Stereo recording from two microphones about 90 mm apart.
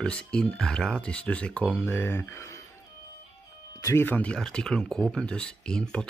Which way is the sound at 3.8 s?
30° left (ahead or behind).